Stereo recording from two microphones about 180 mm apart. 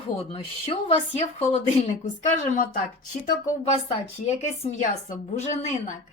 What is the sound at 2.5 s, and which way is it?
Speech, 55° left (ahead or behind).